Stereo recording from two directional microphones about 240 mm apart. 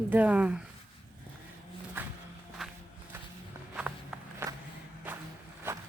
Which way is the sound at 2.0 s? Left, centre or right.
Centre.